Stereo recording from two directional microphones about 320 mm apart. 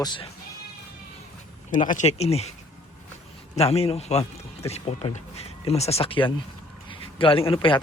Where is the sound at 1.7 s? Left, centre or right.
Left.